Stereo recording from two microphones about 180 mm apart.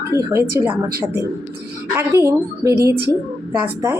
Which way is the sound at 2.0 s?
15° right (ahead or behind).